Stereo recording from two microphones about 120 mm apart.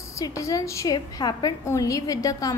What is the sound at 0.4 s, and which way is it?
A woman's voice, 25° left (ahead or behind).